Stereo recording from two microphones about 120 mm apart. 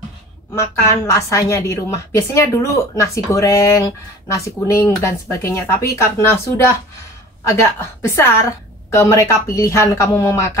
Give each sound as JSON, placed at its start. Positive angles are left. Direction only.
{"t": 0.6, "sound": "a woman's voice", "side_deg": 25}